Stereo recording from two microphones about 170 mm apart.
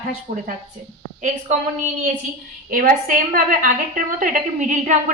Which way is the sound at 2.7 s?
55° right (ahead or behind).